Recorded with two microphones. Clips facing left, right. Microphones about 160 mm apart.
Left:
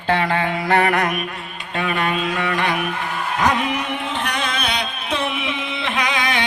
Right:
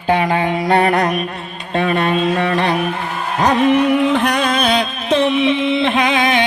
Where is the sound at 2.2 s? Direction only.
25° right (ahead or behind).